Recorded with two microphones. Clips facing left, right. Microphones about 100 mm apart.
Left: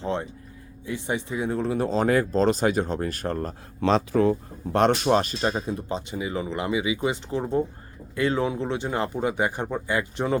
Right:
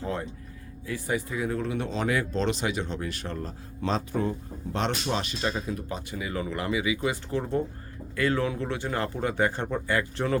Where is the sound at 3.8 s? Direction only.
85° left.